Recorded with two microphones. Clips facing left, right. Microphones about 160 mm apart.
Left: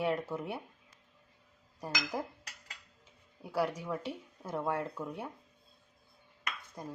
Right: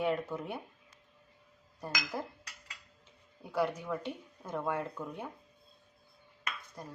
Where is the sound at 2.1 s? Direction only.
15° left (ahead or behind).